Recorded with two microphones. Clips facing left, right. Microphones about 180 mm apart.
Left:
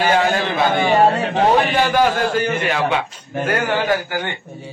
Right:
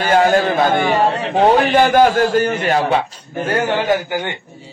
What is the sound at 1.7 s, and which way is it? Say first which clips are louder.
A man's voice: right 4 dB; 45° right (ahead or behind).